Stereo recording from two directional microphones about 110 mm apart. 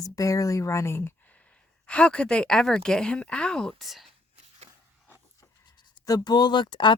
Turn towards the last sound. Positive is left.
turn(degrees=45)  # may be behind; listen again after turning